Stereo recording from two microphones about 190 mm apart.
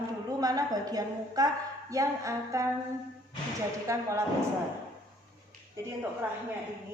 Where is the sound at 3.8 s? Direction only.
15° right (ahead or behind).